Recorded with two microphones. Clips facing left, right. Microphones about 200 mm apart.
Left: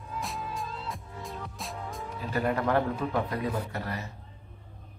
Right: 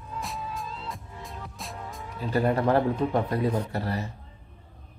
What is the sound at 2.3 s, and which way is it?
Speech, 30° right (ahead or behind).